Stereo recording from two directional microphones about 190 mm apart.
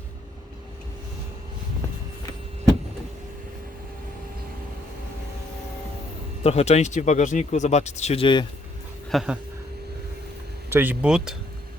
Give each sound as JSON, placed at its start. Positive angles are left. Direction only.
{"t": 6.4, "sound": "speech", "side_deg": 30}
{"t": 9.0, "sound": "speech", "side_deg": 0}
{"t": 10.7, "sound": "speech", "side_deg": -10}